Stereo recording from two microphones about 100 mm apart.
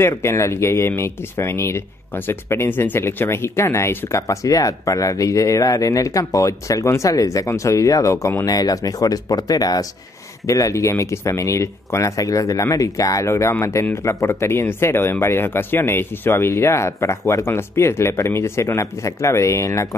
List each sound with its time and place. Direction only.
0.0 s speech: 30° left (ahead or behind)